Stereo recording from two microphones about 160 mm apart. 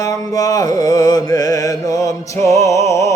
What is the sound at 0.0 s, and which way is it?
Music, 20° left (ahead or behind).